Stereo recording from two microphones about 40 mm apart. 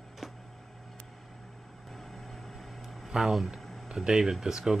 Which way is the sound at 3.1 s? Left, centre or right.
Centre.